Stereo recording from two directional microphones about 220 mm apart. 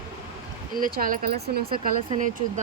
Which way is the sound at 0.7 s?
40° right (ahead or behind).